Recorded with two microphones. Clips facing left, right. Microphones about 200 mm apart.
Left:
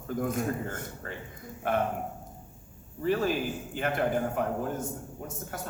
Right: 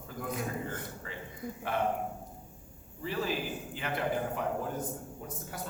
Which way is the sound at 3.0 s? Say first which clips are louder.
Left 6 dB; 50° left (ahead or behind).